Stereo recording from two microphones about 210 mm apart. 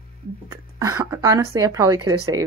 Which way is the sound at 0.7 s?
15° right (ahead or behind).